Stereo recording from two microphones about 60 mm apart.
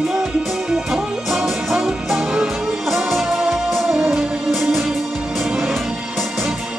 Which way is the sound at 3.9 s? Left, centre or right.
Centre.